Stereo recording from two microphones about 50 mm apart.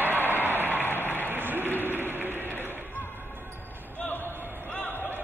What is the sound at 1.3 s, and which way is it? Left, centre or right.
Applause, right.